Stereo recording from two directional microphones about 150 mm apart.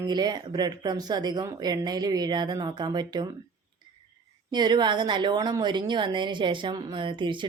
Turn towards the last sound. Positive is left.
turn(degrees=-30)  # may be behind; listen again after turning